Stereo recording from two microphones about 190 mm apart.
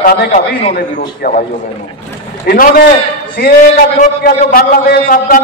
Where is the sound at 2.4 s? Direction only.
50° left (ahead or behind).